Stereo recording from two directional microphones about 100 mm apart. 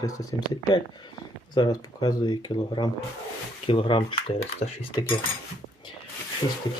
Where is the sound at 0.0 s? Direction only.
35° left (ahead or behind).